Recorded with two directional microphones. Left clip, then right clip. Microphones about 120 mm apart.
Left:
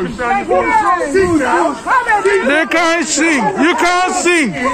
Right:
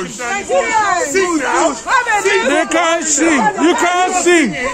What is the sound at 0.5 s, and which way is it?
Speech, 25° right (ahead or behind).